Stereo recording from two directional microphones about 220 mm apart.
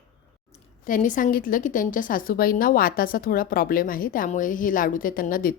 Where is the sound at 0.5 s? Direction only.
35° left (ahead or behind).